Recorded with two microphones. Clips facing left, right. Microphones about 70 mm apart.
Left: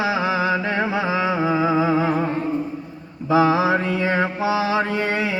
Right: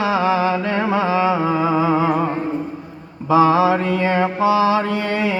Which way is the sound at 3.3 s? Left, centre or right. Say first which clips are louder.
Right 3 dB; right.